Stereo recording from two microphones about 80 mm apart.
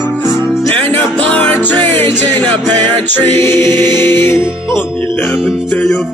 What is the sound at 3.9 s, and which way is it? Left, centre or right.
Music, left.